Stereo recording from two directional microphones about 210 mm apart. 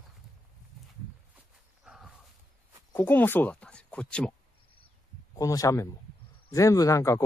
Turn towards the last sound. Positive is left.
turn(degrees=15)  # may be behind; listen again after turning